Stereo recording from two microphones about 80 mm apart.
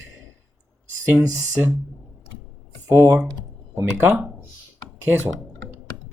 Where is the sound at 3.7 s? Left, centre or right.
Right.